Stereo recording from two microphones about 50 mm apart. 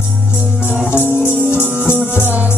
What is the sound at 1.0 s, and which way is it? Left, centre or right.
Music, left.